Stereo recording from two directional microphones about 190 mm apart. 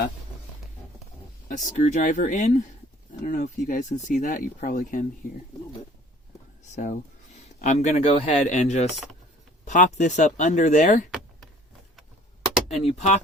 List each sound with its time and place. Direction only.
1.5 s speech: 40° left (ahead or behind)
7.6 s speech: 40° left (ahead or behind)
12.6 s speech: 35° left (ahead or behind)